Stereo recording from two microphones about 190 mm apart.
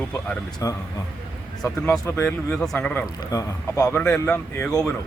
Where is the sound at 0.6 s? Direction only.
15° left (ahead or behind).